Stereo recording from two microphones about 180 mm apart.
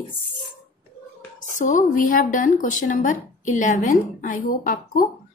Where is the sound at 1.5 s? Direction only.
45° left (ahead or behind).